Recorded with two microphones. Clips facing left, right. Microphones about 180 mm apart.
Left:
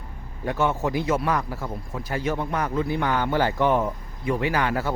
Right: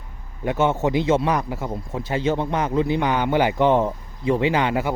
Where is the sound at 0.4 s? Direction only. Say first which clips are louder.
Right 4 dB; 20° right (ahead or behind).